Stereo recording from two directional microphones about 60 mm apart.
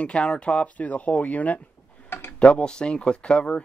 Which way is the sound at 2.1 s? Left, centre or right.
Left.